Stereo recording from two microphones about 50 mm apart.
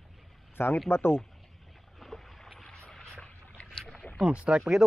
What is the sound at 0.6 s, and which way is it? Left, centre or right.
Speech, left.